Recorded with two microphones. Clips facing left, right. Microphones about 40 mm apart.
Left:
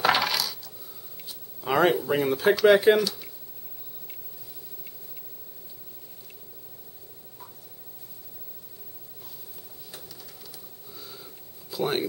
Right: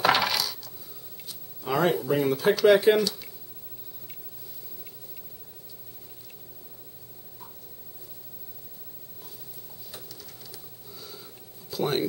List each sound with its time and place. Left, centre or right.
0.0 s coin: centre
1.6 s speech: centre
9.8 s printer: centre
11.7 s a sound: centre